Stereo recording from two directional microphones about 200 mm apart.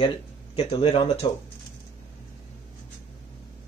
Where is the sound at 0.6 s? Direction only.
30° left (ahead or behind).